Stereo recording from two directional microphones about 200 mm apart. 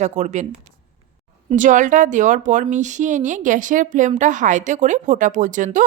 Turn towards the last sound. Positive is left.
turn(degrees=-40)  # may be behind; listen again after turning